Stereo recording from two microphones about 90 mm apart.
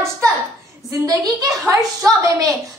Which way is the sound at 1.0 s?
45° right (ahead or behind).